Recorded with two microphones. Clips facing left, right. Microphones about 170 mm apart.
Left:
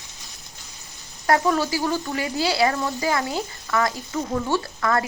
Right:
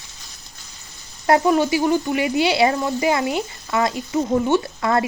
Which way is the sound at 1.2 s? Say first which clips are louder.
Right 4 dB; 20° right (ahead or behind).